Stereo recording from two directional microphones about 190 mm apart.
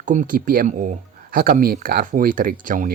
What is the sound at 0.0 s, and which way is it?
Speech, 40° right (ahead or behind).